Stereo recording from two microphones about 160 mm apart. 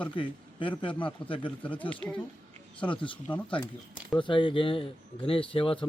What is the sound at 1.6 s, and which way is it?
Speech, 10° left (ahead or behind).